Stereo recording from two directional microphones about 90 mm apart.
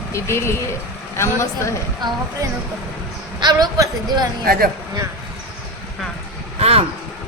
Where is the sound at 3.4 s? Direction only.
50° right (ahead or behind).